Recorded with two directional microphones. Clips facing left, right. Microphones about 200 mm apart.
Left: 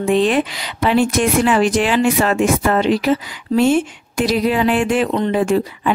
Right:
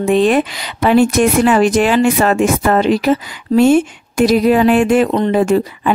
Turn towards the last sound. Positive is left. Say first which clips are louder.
# right 3 dB
turn(degrees=-40)  # may be behind; listen again after turning